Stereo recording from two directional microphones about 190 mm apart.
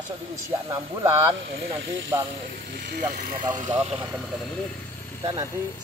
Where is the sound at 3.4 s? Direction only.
25° right (ahead or behind).